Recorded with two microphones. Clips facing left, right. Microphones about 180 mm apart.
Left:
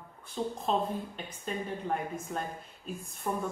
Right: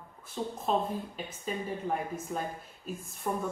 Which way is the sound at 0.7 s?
5° right (ahead or behind).